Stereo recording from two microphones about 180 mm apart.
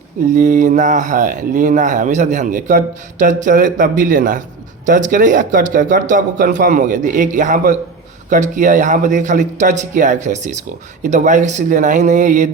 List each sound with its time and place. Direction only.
0.3 s speech: 45° right (ahead or behind)